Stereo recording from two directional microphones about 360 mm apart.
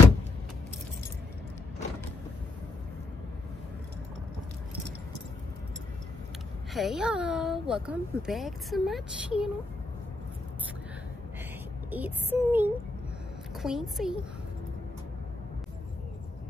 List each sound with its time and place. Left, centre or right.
6.7 s speech: centre
11.9 s speech: centre